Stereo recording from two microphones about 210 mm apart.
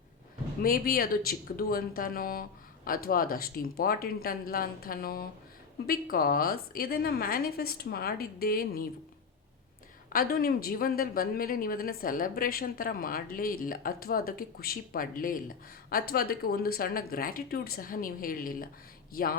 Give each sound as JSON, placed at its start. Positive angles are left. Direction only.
{"t": 0.6, "sound": "speech", "side_deg": 45}
{"t": 10.1, "sound": "speech", "side_deg": 45}